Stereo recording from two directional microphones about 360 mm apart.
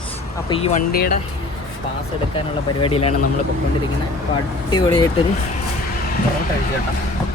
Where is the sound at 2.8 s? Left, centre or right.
Centre.